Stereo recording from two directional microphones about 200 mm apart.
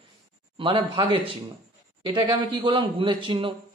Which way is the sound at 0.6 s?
25° right (ahead or behind).